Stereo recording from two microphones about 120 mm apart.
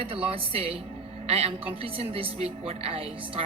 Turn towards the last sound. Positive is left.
turn(degrees=-50)  # may be behind; listen again after turning